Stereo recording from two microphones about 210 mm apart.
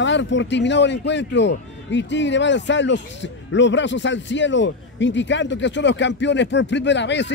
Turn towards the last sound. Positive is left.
turn(degrees=55)  # may be behind; listen again after turning